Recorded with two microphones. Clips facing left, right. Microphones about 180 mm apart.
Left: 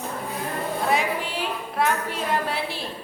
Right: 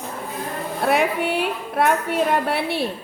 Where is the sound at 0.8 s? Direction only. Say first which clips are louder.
Right 7 dB; 60° right (ahead or behind).